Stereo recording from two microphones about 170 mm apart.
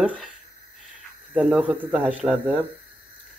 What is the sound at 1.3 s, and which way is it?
Speech, 5° right (ahead or behind).